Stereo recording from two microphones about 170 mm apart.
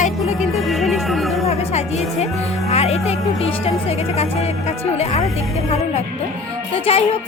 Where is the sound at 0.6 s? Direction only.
Centre (ahead or behind).